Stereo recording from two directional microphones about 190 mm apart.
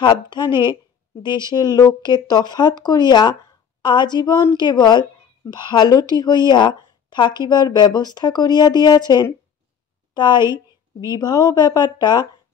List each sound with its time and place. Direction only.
0.0 s a woman's voice: 25° left (ahead or behind)
10.1 s a sound: 25° left (ahead or behind)
11.1 s a woman's voice: 20° left (ahead or behind)